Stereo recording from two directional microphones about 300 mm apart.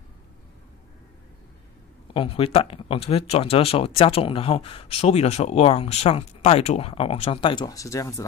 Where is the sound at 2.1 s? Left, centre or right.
Centre.